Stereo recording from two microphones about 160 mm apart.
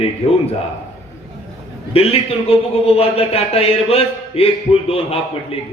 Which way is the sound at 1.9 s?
40° left (ahead or behind).